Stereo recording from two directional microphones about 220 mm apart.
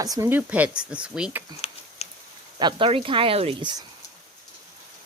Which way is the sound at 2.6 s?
20° right (ahead or behind).